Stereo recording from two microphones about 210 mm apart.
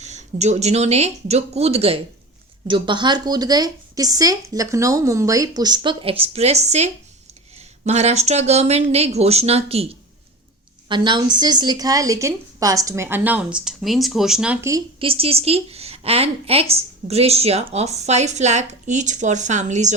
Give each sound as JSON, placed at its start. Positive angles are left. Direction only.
{"t": 0.0, "sound": "a woman's voice", "side_deg": -35}